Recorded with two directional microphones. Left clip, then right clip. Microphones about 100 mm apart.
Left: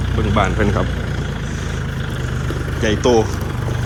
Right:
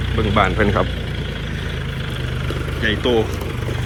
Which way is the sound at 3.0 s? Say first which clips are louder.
Left 4 dB; 55° left (ahead or behind).